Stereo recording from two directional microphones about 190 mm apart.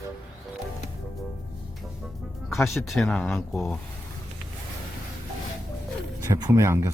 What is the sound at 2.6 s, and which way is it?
Speech, 15° left (ahead or behind).